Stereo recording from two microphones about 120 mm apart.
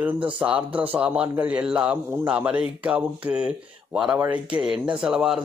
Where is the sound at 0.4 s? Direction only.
10° right (ahead or behind).